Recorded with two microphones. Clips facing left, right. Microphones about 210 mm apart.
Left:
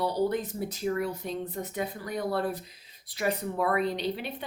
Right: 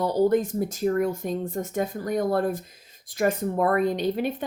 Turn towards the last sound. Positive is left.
turn(degrees=-45)  # may be behind; listen again after turning